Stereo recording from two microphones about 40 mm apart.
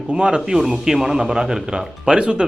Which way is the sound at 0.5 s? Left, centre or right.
Centre.